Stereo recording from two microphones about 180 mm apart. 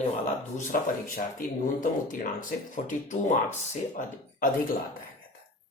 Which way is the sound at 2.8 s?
45° left (ahead or behind).